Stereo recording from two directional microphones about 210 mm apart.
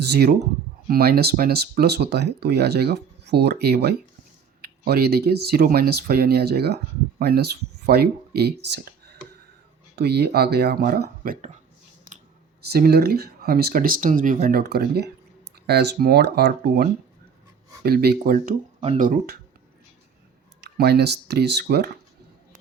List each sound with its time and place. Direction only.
0.1 s speech: 50° right (ahead or behind)
12.7 s speech: 45° right (ahead or behind)
20.6 s speech: 50° right (ahead or behind)